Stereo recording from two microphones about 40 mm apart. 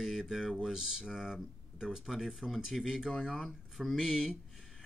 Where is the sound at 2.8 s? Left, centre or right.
Centre.